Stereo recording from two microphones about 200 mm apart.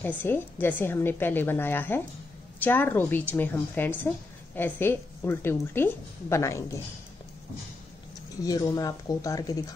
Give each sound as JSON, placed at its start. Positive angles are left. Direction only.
{"t": 0.2, "sound": "a woman's voice", "side_deg": 10}
{"t": 8.4, "sound": "a woman's voice", "side_deg": 15}